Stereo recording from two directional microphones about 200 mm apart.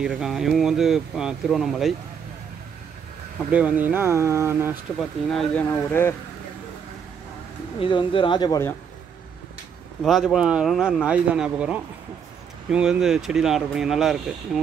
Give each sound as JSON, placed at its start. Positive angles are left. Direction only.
{"t": 0.0, "sound": "speech", "side_deg": 0}
{"t": 3.5, "sound": "speech", "side_deg": -5}
{"t": 5.3, "sound": "speech", "side_deg": 5}
{"t": 7.8, "sound": "speech", "side_deg": 25}
{"t": 10.0, "sound": "speech", "side_deg": 0}